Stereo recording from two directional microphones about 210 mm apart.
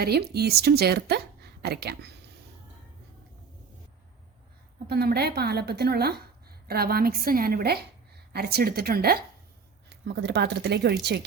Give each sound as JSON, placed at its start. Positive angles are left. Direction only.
{"t": 0.0, "sound": "a woman's voice", "side_deg": -50}
{"t": 4.9, "sound": "a woman's voice", "side_deg": -50}